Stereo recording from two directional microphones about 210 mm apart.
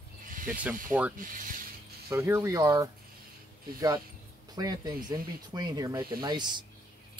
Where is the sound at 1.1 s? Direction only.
40° right (ahead or behind).